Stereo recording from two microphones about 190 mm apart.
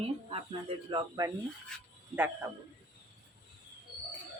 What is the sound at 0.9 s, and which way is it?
Speech, 20° right (ahead or behind).